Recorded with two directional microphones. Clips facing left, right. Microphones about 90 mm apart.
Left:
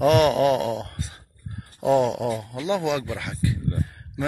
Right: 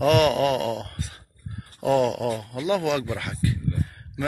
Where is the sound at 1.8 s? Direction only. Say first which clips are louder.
Left 1 dB; 20° left (ahead or behind).